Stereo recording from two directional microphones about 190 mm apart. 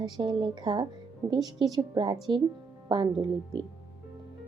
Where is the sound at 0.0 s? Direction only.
20° right (ahead or behind).